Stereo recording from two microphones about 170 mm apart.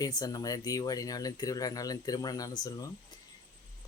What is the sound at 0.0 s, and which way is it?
Speech, 25° left (ahead or behind).